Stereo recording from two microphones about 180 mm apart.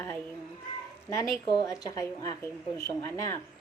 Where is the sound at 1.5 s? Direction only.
20° left (ahead or behind).